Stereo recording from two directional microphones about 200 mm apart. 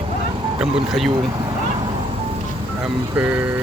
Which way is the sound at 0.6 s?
Centre (ahead or behind).